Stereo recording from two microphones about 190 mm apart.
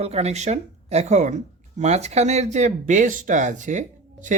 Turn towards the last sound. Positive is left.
turn(degrees=-40)  # may be behind; listen again after turning